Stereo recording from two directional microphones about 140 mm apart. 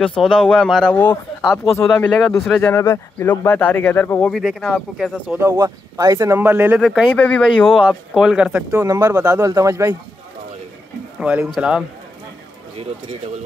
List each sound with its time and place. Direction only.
0.2 s speech: 5° left (ahead or behind)
1.8 s speech: 15° left (ahead or behind); by 5.4 s centre (ahead or behind)
5.4 s speech: 25° right (ahead or behind)
6.8 s speech: centre (ahead or behind)
7.2 s speech: 10° left (ahead or behind)
7.4 s speech: 5° right (ahead or behind)
8.7 s speech: 25° right (ahead or behind)
11.1 s speech: 5° right (ahead or behind)